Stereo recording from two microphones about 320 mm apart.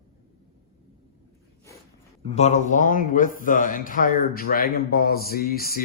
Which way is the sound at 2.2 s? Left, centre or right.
Centre.